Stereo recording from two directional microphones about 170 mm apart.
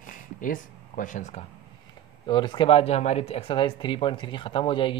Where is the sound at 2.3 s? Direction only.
30° left (ahead or behind).